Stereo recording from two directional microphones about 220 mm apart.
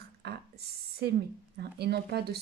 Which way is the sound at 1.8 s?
45° right (ahead or behind).